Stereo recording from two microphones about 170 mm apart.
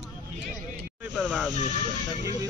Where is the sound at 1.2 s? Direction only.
Centre (ahead or behind).